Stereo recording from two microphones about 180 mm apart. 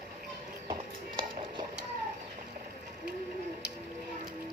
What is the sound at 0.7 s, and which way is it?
Music, 25° right (ahead or behind).